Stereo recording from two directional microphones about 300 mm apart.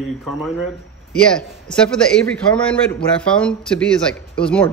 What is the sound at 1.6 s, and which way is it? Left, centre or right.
A man's voice, centre.